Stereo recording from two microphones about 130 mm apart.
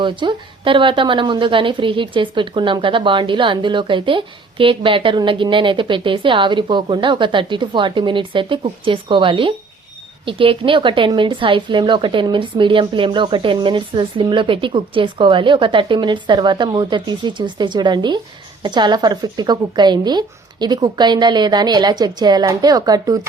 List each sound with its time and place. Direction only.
0.0 s a woman's voice: 40° right (ahead or behind)